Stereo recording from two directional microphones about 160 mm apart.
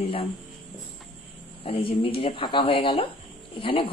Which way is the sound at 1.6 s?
35° left (ahead or behind).